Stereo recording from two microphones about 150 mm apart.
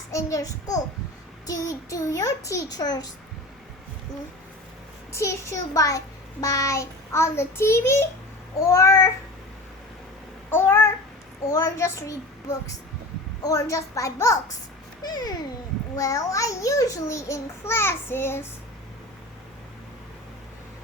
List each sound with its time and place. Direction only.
0.1 s a child's voice: 20° left (ahead or behind)
5.1 s a child's voice: 20° left (ahead or behind)
10.5 s a child's voice: 15° left (ahead or behind)